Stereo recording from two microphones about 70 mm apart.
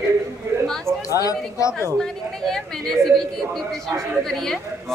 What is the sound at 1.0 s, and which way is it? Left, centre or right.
Speech, left.